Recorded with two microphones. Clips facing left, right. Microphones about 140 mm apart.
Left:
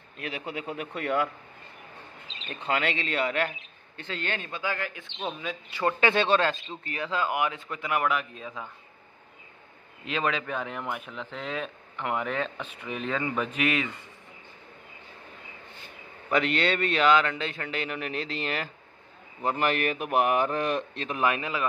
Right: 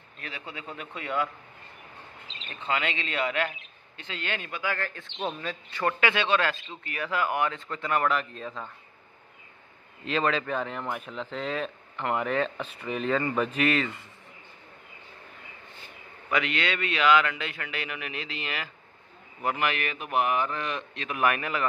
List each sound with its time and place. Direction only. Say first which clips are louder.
0.3 s speech: left 5 dB; 15° left (ahead or behind)
0.7 s a man's voice: left 2 dB; 55° left (ahead or behind)
2.7 s a man's voice: left 2 dB; 40° left (ahead or behind)
4.7 s speech: right 1 dB; 10° left (ahead or behind)
5.9 s speech: left 2 dB; 30° left (ahead or behind); by 8.6 s 5° left (ahead or behind)
10.0 s speech: right 2 dB; 5° left (ahead or behind)
16.3 s a man's voice: left 3 dB; 40° left (ahead or behind)
21.2 s speech: right 1 dB; 20° left (ahead or behind)